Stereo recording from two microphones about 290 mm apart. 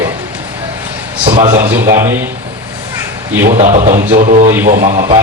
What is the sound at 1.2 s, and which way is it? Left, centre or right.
Speech, right.